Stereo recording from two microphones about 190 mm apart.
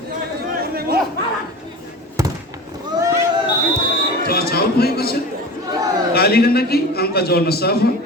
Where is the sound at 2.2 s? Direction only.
15° right (ahead or behind).